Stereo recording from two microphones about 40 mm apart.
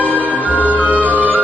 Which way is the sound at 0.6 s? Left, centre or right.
Right.